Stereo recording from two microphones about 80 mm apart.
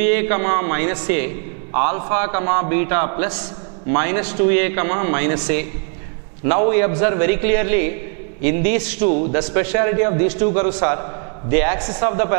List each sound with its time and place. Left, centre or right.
0.0 s a man's voice: centre